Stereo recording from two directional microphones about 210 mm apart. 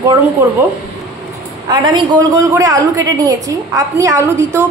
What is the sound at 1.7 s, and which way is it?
A woman's voice, 20° right (ahead or behind).